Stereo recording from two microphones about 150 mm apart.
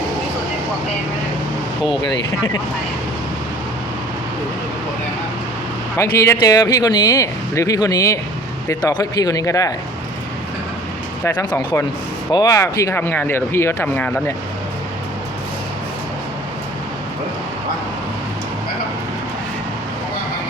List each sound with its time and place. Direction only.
6.0 s speech: 20° left (ahead or behind)
11.2 s speech: 15° left (ahead or behind)